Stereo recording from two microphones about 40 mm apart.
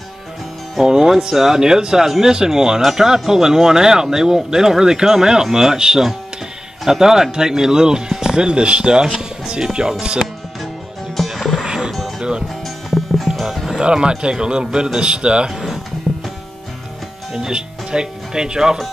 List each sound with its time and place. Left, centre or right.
0.8 s speech: centre
9.1 s music: centre
9.5 s speech: centre
11.2 s music: centre
11.6 s music: centre
12.2 s speech: right
12.6 s music: centre
13.7 s a man's voice: right
15.5 s music: centre
16.1 s music: centre
17.3 s speech: centre